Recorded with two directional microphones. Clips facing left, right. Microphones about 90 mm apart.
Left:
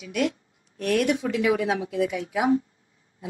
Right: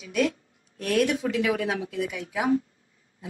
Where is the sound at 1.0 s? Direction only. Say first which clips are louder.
Left 1 dB; 20° left (ahead or behind).